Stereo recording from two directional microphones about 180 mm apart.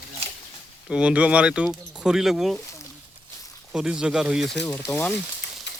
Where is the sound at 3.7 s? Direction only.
5° right (ahead or behind).